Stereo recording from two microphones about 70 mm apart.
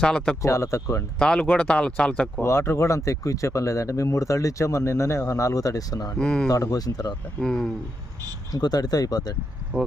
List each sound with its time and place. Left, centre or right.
0.0 s speech: centre
0.4 s speech: left
1.2 s speech: centre
2.4 s speech: left
6.1 s speech: centre
6.5 s speech: left
7.4 s speech: centre
8.5 s speech: left